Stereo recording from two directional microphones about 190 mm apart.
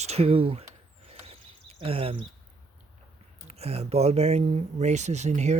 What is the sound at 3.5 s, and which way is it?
Speech, 35° right (ahead or behind).